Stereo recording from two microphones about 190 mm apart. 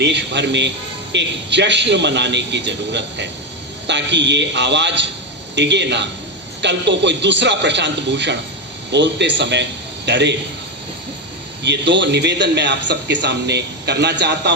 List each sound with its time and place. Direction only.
0.0 s a man's voice: 65° right (ahead or behind)
11.6 s a man's voice: 65° right (ahead or behind)